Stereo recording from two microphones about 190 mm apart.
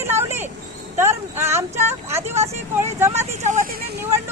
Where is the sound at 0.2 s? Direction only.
15° right (ahead or behind).